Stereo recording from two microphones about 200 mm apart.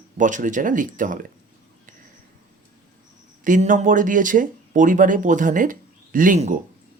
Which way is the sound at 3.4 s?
40° right (ahead or behind).